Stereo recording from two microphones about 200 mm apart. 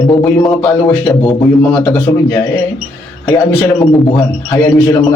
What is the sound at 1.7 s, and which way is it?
A man's voice, 15° left (ahead or behind).